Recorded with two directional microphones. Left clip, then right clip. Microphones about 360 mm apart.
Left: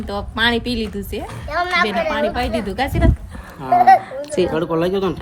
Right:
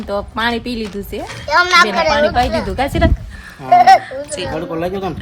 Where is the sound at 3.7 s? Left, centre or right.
Right.